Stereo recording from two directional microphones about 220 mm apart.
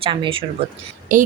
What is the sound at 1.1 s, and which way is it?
Speech, 35° right (ahead or behind).